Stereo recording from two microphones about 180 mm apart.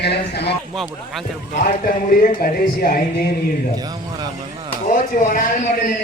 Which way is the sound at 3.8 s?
20° right (ahead or behind).